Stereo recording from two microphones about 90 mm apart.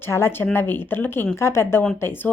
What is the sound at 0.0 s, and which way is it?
A woman's voice, 25° left (ahead or behind).